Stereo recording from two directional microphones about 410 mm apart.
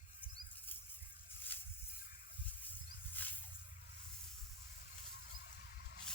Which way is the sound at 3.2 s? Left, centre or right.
Centre.